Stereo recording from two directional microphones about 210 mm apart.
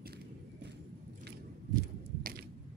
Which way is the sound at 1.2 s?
45° right (ahead or behind).